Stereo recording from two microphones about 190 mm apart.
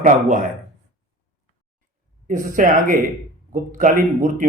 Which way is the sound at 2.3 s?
45° right (ahead or behind).